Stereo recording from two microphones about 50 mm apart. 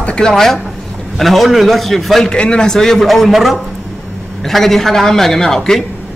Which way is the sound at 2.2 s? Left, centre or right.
Centre.